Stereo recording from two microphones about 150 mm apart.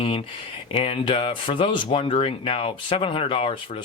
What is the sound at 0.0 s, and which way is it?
Speech, 35° left (ahead or behind).